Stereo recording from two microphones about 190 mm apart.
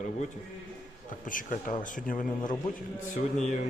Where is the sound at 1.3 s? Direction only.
45° left (ahead or behind).